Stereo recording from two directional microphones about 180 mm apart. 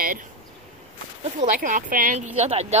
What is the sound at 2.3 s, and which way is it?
Speech, 35° right (ahead or behind).